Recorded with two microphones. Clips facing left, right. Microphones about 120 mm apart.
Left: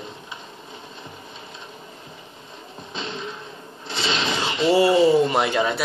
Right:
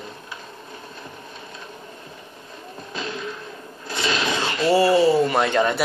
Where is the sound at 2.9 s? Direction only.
25° left (ahead or behind).